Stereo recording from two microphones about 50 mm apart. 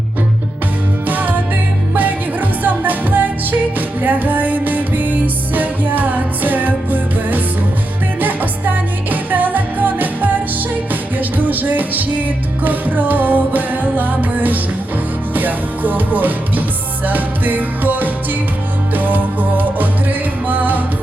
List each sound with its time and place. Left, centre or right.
1.0 s music: right